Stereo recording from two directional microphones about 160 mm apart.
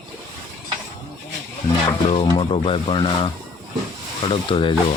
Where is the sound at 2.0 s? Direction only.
35° left (ahead or behind).